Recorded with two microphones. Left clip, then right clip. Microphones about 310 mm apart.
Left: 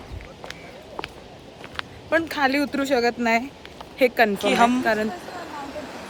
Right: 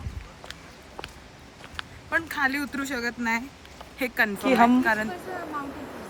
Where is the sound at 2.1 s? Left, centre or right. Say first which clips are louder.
Left 4 dB; centre.